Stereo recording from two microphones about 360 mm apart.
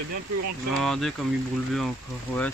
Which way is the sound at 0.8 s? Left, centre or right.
Centre.